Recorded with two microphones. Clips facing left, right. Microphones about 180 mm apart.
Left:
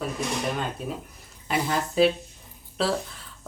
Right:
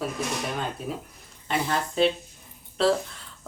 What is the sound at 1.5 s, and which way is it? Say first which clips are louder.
Speech: left 1 dB; 5° left (ahead or behind).